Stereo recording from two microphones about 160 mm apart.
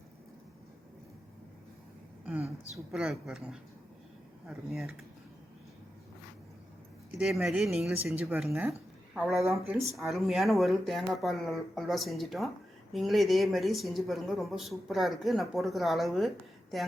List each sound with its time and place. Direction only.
2.2 s speech: 10° right (ahead or behind)
7.2 s speech: centre (ahead or behind)
9.5 s speech: 15° right (ahead or behind)
9.9 s speech: centre (ahead or behind)